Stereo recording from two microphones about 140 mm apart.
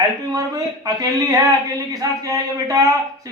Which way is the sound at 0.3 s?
25° right (ahead or behind).